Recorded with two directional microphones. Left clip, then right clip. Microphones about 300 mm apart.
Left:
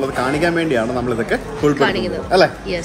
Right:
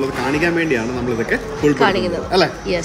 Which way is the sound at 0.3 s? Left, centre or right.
Centre.